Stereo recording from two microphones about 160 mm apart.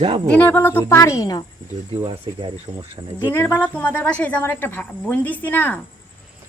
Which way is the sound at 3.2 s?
15° left (ahead or behind).